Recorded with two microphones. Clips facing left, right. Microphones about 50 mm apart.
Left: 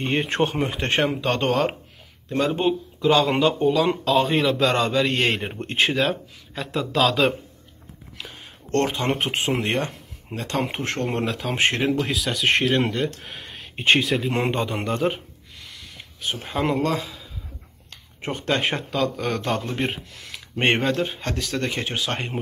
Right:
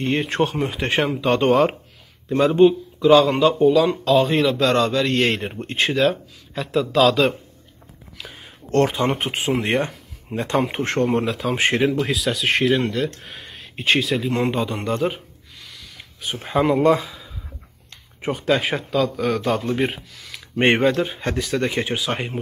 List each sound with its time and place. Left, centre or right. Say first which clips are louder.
0.0 s a man's voice: right 2 dB; centre
11.1 s a man's voice: right 3 dB; centre
14.5 s a sound: right 2 dB; centre
16.3 s a man's voice: right 6 dB; centre
16.7 s speech: right 9 dB; right
17.0 s a sound: right 1 dB; centre
18.2 s a man's voice: right 3 dB; centre
20.5 s speech: right 4 dB; centre